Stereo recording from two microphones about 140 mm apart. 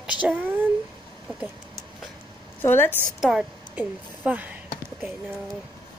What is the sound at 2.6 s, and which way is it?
Speech, 15° left (ahead or behind).